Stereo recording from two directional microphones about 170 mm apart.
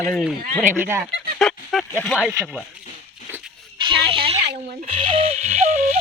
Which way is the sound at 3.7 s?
30° right (ahead or behind).